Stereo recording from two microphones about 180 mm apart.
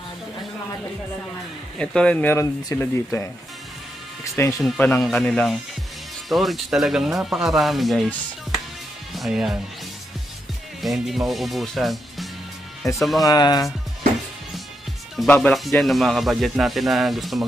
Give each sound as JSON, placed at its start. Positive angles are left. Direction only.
{"t": 1.8, "sound": "speech", "side_deg": 5}
{"t": 4.6, "sound": "speech", "side_deg": 5}
{"t": 10.8, "sound": "speech", "side_deg": 0}
{"t": 13.2, "sound": "speech", "side_deg": 20}
{"t": 15.1, "sound": "speech", "side_deg": 10}